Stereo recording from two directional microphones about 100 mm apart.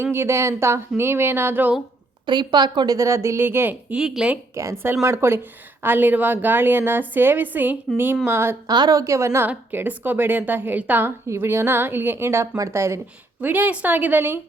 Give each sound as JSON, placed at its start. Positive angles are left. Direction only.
{"t": 0.0, "sound": "a woman's voice", "side_deg": -25}
{"t": 2.2, "sound": "speech", "side_deg": -45}
{"t": 4.0, "sound": "speech", "side_deg": -5}
{"t": 4.5, "sound": "a woman's voice", "side_deg": -30}
{"t": 8.6, "sound": "a woman's voice", "side_deg": -40}
{"t": 13.4, "sound": "a woman's voice", "side_deg": -15}